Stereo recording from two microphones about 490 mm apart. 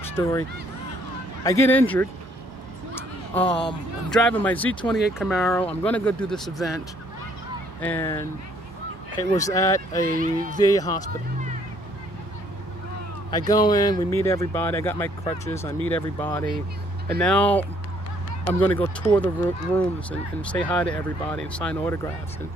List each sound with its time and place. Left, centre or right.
0.0 s speech: centre
1.5 s speech: centre
7.8 s speech: centre
9.3 s speech: centre
10.2 s speech: centre
10.6 s speech: centre
13.3 s speech: centre